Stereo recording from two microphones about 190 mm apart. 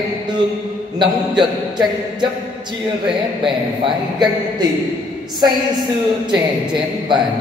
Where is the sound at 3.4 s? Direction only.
25° right (ahead or behind).